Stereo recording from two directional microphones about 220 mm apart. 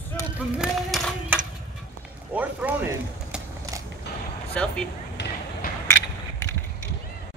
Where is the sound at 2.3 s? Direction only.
5° right (ahead or behind).